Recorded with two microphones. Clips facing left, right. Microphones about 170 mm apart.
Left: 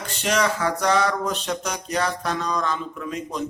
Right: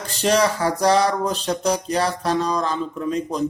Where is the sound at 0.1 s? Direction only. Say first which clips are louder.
Right 4 dB; 35° right (ahead or behind).